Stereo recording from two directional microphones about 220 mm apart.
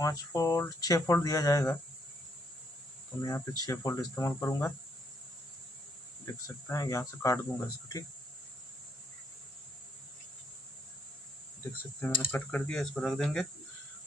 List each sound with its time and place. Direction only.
0.0 s speech: 15° left (ahead or behind)
3.2 s speech: 15° left (ahead or behind)
6.4 s speech: 15° left (ahead or behind)
12.0 s speech: 5° left (ahead or behind)